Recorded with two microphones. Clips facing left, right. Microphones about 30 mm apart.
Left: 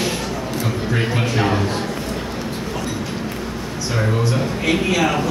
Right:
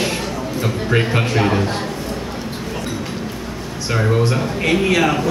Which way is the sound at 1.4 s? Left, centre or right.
Centre.